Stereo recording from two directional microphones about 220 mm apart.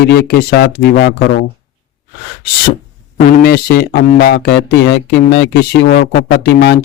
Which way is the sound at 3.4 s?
45° left (ahead or behind).